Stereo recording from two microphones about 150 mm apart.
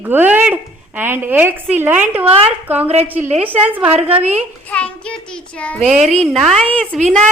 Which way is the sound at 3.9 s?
45° right (ahead or behind).